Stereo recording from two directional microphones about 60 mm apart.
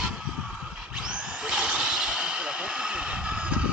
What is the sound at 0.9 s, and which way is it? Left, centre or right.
Drill, centre.